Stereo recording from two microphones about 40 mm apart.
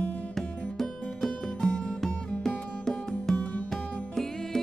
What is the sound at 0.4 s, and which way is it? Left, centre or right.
Music, centre.